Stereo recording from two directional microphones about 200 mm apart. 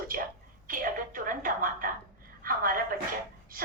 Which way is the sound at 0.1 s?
45° right (ahead or behind).